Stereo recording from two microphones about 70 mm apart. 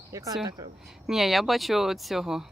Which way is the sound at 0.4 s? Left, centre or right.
Right.